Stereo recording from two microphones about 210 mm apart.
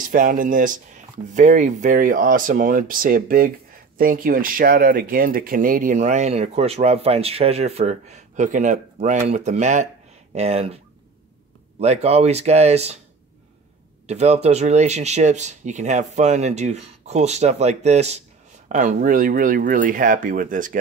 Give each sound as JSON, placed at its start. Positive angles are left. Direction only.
{"t": 0.0, "sound": "speech", "side_deg": -40}
{"t": 11.8, "sound": "speech", "side_deg": -30}
{"t": 14.0, "sound": "speech", "side_deg": -30}